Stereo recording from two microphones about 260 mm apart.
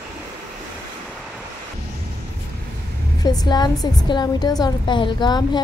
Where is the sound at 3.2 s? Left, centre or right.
Centre.